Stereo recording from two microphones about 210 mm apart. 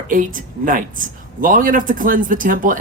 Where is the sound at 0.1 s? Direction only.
40° right (ahead or behind).